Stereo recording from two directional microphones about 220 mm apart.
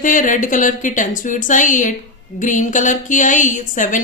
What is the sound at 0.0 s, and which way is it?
A woman's voice, 35° left (ahead or behind).